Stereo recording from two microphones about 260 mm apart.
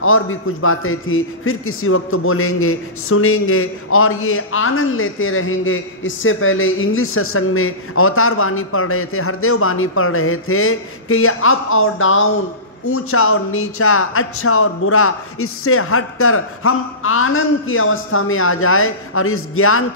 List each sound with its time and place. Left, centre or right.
0.0 s a man's voice: left